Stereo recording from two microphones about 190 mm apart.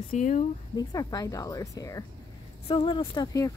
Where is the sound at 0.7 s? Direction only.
20° left (ahead or behind).